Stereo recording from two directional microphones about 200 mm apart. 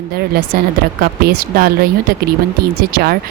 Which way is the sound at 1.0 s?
50° right (ahead or behind).